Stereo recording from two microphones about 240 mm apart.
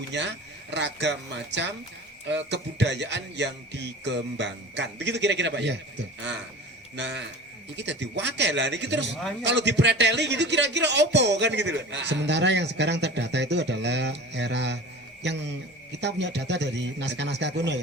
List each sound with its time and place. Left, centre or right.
0.7 s a man's voice: right
6.9 s a man's voice: right